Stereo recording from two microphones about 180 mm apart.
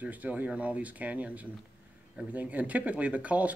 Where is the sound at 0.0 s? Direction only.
10° right (ahead or behind).